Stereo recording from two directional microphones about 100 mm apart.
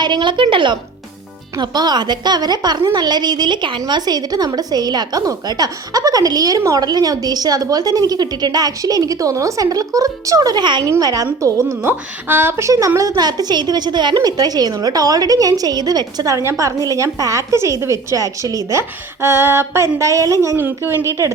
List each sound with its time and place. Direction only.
0.0 s a woman's voice: 50° right (ahead or behind)
1.5 s a woman's voice: 45° right (ahead or behind)
10.8 s a woman's voice: 35° right (ahead or behind)
20.6 s a woman's voice: 20° right (ahead or behind)